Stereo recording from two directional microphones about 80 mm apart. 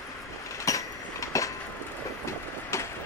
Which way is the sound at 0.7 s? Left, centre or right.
Left.